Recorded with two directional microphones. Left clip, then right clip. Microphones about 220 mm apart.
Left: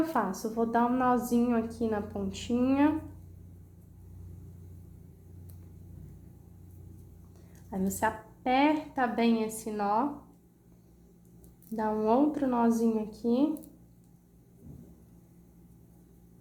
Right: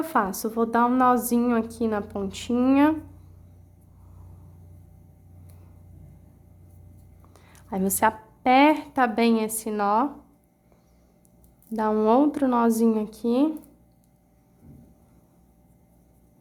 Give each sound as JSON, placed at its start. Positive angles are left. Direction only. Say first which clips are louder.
{"t": 0.0, "sound": "a woman's voice", "louder": "right 5 dB", "side_deg": -40}
{"t": 7.5, "sound": "a woman's voice", "louder": "right 7 dB", "side_deg": -40}
{"t": 11.8, "sound": "a woman's voice", "louder": "right 6 dB", "side_deg": -40}